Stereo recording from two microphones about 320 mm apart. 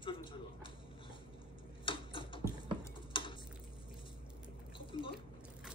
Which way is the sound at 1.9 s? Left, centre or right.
Centre.